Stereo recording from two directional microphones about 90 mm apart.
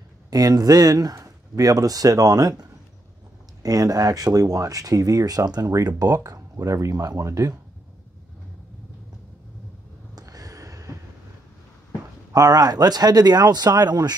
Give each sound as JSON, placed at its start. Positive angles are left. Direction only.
{"t": 0.3, "sound": "speech", "side_deg": -45}
{"t": 3.6, "sound": "speech", "side_deg": -45}
{"t": 10.1, "sound": "a sound", "side_deg": -45}
{"t": 12.3, "sound": "speech", "side_deg": -45}